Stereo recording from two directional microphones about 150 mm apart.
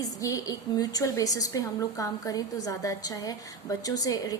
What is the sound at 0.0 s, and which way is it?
A woman's voice, 25° left (ahead or behind).